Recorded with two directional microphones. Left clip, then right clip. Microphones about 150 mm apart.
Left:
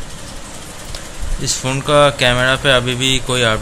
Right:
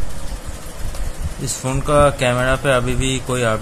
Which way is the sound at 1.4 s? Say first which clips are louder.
Left 4 dB; 5° right (ahead or behind).